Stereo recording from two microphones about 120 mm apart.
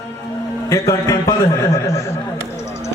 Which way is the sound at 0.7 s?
30° left (ahead or behind).